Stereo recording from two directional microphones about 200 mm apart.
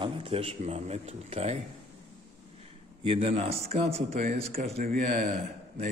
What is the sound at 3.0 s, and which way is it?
A man's voice, 30° right (ahead or behind).